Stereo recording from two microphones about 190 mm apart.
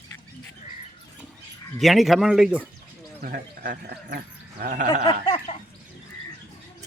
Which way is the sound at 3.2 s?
45° right (ahead or behind).